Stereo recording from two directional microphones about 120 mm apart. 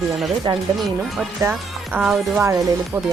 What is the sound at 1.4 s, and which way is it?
Speech, 25° right (ahead or behind).